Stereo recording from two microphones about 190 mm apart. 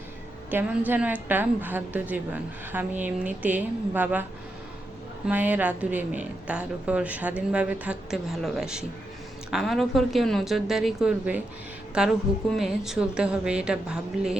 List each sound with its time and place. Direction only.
0.5 s a woman's voice: 10° right (ahead or behind)